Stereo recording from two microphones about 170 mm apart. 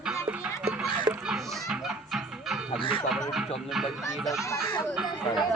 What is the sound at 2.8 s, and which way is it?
Music, 30° left (ahead or behind).